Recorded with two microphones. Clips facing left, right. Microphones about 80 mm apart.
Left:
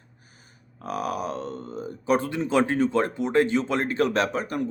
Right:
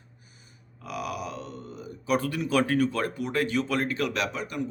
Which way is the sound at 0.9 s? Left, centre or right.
Left.